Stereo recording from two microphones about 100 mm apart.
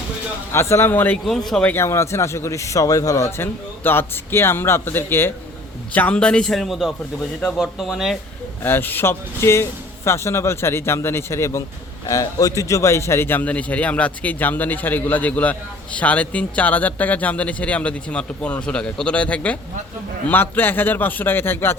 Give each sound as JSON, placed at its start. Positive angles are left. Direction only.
{"t": 0.5, "sound": "a man's voice", "side_deg": 25}
{"t": 1.2, "sound": "speech", "side_deg": 0}
{"t": 1.6, "sound": "a man's voice", "side_deg": 25}
{"t": 8.6, "sound": "a man's voice", "side_deg": 20}